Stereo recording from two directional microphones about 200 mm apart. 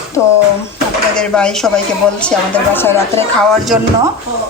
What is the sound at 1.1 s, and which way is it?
A woman's voice, 5° left (ahead or behind).